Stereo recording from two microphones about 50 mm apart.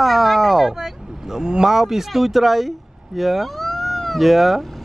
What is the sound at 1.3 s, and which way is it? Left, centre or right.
Speech, centre.